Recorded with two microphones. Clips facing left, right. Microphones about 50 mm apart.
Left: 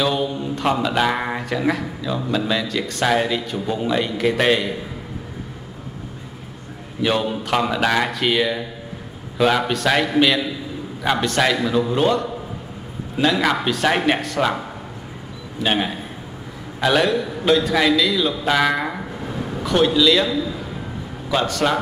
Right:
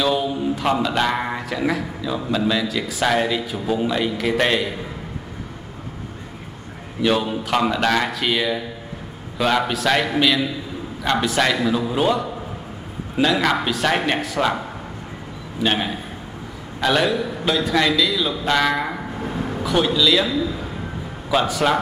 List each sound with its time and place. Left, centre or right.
0.0 s speech: centre
7.0 s speech: centre
15.6 s speech: centre
19.1 s a sound: centre
19.6 s speech: centre